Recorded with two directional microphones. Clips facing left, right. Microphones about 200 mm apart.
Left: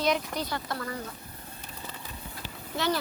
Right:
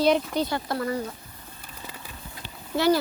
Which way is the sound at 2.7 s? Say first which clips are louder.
Right 8 dB; 35° right (ahead or behind).